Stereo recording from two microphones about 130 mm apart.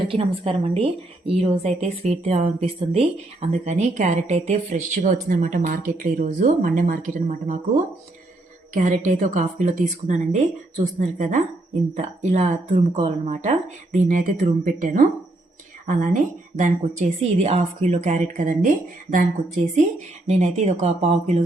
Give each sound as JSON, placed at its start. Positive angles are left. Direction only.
{"t": 0.1, "sound": "a woman's voice", "side_deg": -45}
{"t": 4.5, "sound": "speech", "side_deg": -80}
{"t": 8.7, "sound": "a woman's voice", "side_deg": -70}
{"t": 16.0, "sound": "speech", "side_deg": -75}